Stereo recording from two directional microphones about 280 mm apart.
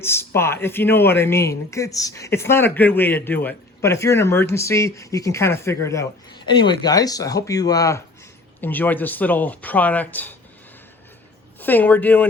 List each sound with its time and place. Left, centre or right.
0.0 s speech: centre
11.6 s speech: centre